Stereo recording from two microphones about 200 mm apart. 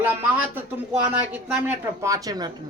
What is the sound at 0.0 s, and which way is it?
A man's voice, 10° right (ahead or behind).